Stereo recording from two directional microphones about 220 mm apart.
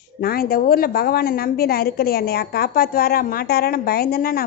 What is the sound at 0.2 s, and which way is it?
A woman's voice, 45° left (ahead or behind).